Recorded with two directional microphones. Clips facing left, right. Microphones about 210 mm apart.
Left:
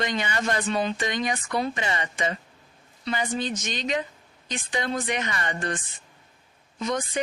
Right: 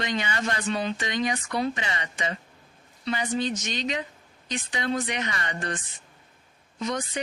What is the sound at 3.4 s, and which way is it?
Speech, 50° left (ahead or behind).